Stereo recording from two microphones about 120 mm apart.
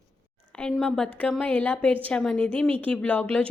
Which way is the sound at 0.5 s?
5° left (ahead or behind).